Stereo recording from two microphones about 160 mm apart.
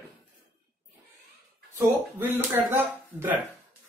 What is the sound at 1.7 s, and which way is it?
A man's voice, 10° right (ahead or behind).